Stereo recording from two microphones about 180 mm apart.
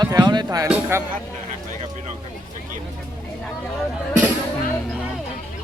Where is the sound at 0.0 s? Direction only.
20° right (ahead or behind).